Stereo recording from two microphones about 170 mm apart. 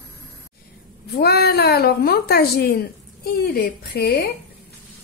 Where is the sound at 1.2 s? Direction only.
65° left (ahead or behind).